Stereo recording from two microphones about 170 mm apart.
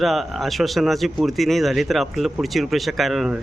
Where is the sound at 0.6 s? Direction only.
Centre (ahead or behind).